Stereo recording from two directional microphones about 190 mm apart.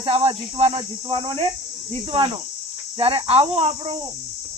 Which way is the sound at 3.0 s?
30° right (ahead or behind).